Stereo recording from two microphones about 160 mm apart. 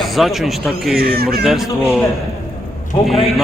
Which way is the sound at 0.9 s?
70° right (ahead or behind).